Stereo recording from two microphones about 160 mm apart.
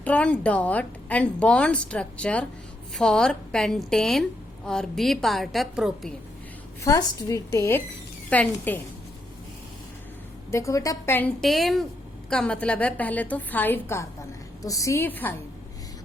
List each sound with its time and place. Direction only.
0.0 s a woman's voice: 10° left (ahead or behind)
6.8 s a woman's voice: 20° left (ahead or behind)
10.5 s a woman's voice: 20° left (ahead or behind)
11.3 s a woman's voice: centre (ahead or behind)